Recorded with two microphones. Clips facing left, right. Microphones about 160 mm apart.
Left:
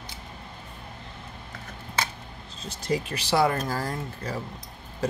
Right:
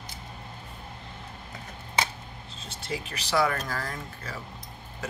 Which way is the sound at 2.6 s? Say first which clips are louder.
Left 7 dB; 35° left (ahead or behind).